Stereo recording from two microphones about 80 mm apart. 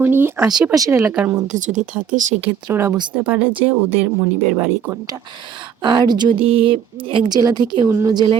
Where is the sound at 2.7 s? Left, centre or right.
Right.